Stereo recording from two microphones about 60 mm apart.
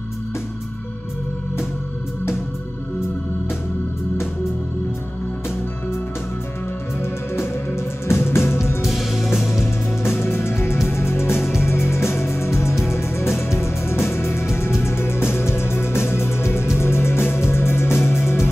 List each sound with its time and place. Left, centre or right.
7.0 s music: left
8.8 s music: centre
10.0 s music: left
11.3 s music: centre
11.6 s music: left